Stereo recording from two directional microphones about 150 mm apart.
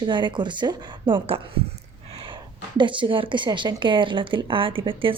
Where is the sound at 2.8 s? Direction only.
35° right (ahead or behind).